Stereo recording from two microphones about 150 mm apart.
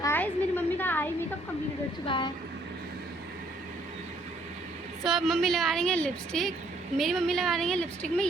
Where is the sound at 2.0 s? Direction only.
35° left (ahead or behind).